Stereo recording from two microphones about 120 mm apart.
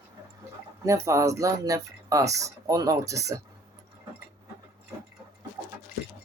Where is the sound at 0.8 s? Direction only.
25° right (ahead or behind).